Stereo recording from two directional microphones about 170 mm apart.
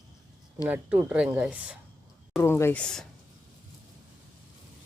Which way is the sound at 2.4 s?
15° left (ahead or behind).